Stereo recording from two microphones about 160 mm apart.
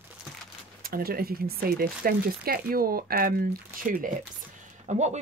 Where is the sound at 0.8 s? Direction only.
65° right (ahead or behind).